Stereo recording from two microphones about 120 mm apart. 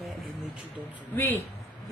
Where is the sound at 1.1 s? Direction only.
20° left (ahead or behind).